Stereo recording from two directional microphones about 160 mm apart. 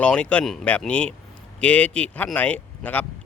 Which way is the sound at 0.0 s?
5° left (ahead or behind).